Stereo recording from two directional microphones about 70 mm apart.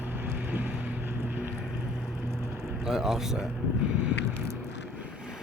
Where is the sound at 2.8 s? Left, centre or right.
Centre.